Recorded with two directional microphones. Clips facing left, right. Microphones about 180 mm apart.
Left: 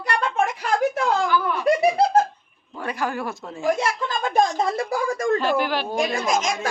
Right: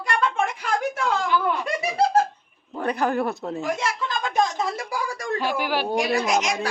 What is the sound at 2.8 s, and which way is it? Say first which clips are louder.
Speech: right 4 dB; 35° right (ahead or behind).